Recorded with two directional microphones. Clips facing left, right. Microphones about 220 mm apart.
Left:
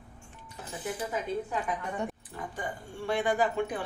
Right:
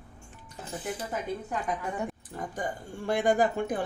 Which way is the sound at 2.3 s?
45° right (ahead or behind).